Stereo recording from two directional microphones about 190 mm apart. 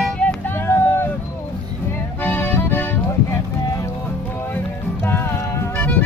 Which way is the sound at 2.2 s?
10° left (ahead or behind).